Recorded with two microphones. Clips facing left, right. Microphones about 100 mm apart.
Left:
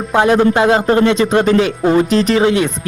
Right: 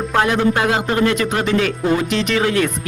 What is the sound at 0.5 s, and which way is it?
Speech, 30° left (ahead or behind).